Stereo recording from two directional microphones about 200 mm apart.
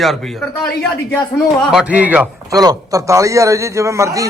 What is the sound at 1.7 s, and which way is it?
A man's voice, 5° right (ahead or behind).